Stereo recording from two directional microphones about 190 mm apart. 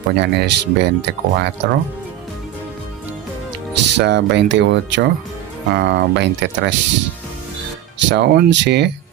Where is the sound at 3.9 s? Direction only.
65° right (ahead or behind).